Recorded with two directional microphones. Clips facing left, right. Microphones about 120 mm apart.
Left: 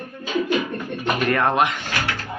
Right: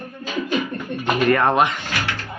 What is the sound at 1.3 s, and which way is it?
Speech, centre (ahead or behind).